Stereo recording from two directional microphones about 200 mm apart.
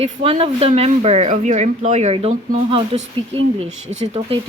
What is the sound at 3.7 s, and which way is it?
Speech, 75° right (ahead or behind).